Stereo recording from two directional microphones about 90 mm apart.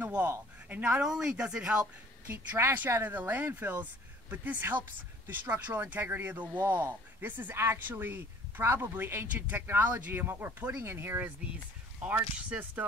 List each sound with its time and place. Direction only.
0.0 s a sound: 20° right (ahead or behind)
0.7 s a woman's voice: 20° right (ahead or behind)
1.0 s a woman's voice: 5° right (ahead or behind)
2.3 s a woman's voice: 25° right (ahead or behind)